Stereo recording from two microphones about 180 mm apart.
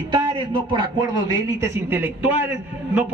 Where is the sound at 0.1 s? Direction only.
25° right (ahead or behind).